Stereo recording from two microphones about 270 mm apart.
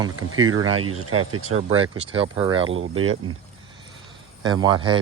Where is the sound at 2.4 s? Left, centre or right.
Centre.